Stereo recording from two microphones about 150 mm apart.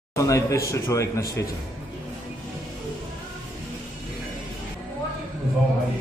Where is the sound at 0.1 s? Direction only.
20° left (ahead or behind).